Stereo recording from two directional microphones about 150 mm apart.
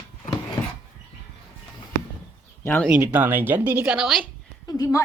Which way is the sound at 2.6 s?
10° left (ahead or behind).